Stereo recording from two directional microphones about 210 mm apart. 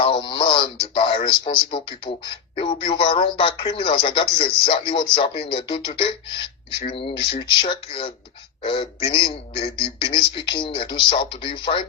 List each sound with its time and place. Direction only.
0.0 s speech: 25° left (ahead or behind)